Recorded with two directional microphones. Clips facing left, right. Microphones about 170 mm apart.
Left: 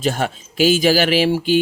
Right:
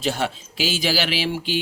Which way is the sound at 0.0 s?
50° left (ahead or behind).